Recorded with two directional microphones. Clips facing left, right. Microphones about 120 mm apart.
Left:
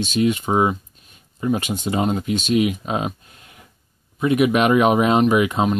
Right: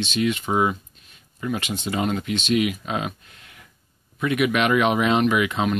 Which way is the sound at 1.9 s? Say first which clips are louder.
Left 3 dB; 30° left (ahead or behind).